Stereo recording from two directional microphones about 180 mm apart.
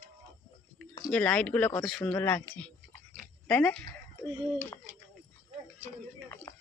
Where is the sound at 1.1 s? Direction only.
5° left (ahead or behind).